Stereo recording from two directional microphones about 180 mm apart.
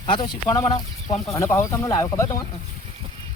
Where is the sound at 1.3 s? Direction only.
15° left (ahead or behind).